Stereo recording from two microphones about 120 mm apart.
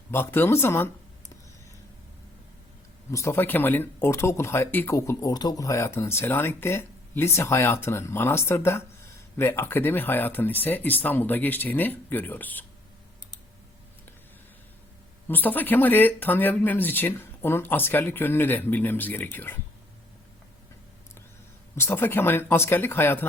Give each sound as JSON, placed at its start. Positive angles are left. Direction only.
{"t": 0.1, "sound": "speech", "side_deg": 20}
{"t": 3.1, "sound": "speech", "side_deg": 25}
{"t": 15.3, "sound": "speech", "side_deg": 15}
{"t": 21.8, "sound": "speech", "side_deg": 20}